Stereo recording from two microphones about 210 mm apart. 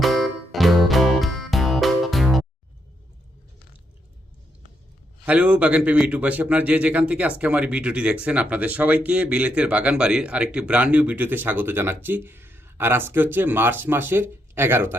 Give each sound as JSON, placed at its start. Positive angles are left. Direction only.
{"t": 0.0, "sound": "music", "side_deg": 0}
{"t": 5.2, "sound": "a man's voice", "side_deg": -5}